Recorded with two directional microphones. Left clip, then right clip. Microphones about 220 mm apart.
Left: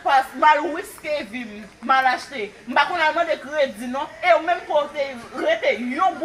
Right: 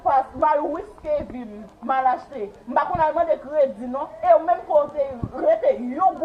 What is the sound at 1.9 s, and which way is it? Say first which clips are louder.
A woman's voice: left 2 dB; 30° left (ahead or behind).